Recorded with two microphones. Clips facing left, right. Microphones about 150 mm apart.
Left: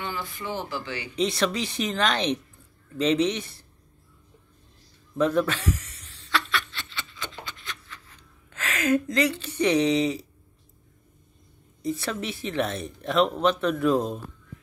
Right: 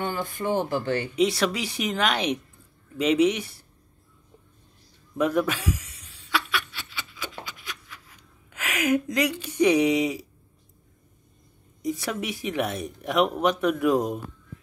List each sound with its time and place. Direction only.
0.0 s speech: 50° right (ahead or behind)
1.1 s speech: 10° right (ahead or behind)
5.1 s chuckle: 10° right (ahead or behind)
11.8 s speech: 10° right (ahead or behind)